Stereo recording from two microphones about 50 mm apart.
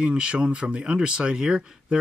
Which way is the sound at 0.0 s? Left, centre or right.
Centre.